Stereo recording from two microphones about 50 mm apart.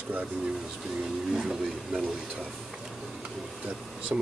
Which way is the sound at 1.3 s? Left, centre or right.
Centre.